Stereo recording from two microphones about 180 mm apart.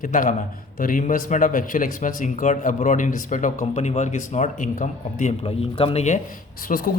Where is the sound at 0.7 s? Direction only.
50° left (ahead or behind).